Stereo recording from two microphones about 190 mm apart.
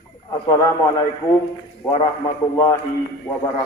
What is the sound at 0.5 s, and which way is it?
Speech, 15° left (ahead or behind).